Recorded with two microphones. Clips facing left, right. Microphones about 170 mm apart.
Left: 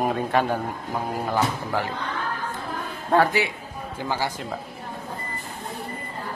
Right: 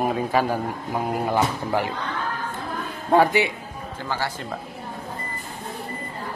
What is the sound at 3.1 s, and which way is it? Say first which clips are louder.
Speech: right 2 dB; 15° right (ahead or behind).